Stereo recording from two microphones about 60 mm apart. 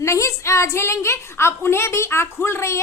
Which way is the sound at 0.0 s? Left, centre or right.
Left.